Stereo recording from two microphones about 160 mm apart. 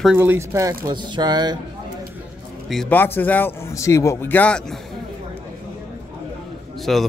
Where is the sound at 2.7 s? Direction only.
5° left (ahead or behind).